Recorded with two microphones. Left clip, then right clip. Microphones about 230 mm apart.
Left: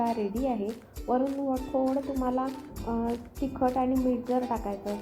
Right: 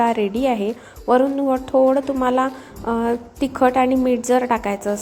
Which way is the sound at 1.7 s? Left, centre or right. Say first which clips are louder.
Right 14 dB; right.